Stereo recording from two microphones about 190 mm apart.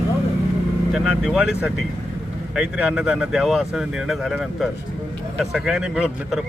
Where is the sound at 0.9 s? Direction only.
5° right (ahead or behind).